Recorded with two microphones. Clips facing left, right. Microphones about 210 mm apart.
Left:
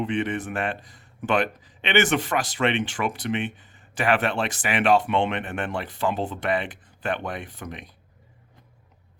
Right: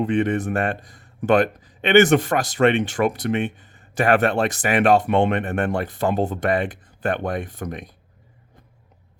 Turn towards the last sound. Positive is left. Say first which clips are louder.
# right 6 dB
turn(degrees=-45)  # may be behind; listen again after turning